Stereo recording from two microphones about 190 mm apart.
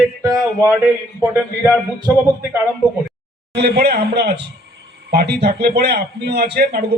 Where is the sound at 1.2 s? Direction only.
5° right (ahead or behind).